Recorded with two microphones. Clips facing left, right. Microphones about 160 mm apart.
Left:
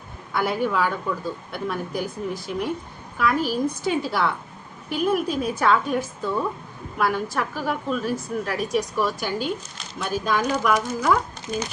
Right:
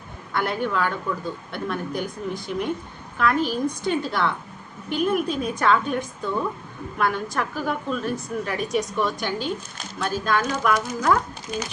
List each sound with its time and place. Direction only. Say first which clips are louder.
0.3 s a woman's voice: left 2 dB; 5° left (ahead or behind)